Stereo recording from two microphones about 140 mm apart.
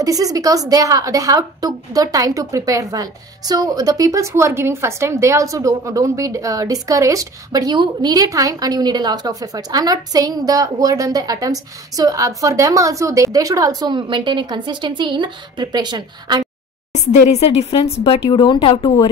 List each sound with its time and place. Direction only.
0.0 s a woman's voice: 25° right (ahead or behind)
16.9 s speech: 55° left (ahead or behind); by 19.0 s 40° left (ahead or behind)